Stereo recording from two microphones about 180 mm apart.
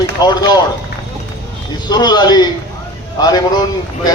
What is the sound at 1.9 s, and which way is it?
A man's voice, 25° left (ahead or behind).